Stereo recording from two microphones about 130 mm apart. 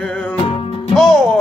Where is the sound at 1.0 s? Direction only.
5° left (ahead or behind).